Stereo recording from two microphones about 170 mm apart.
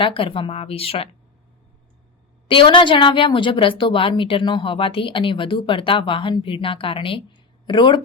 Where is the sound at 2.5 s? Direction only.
30° left (ahead or behind).